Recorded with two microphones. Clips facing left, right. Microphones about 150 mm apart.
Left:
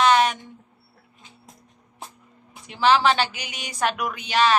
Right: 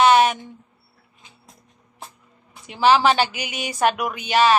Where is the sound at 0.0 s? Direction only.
10° right (ahead or behind).